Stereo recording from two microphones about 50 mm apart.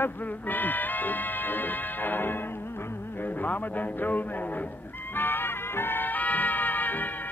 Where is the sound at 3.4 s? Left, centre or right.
Left.